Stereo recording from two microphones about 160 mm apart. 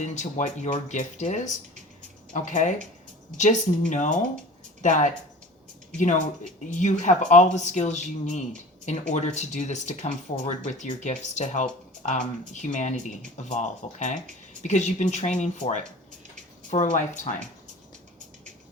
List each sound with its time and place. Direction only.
0.0 s speech: 50° left (ahead or behind)
6.7 s speech: 50° left (ahead or behind)